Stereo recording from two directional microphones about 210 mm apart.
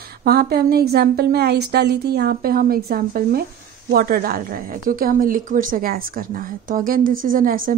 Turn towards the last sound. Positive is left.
turn(degrees=-40)  # may be behind; listen again after turning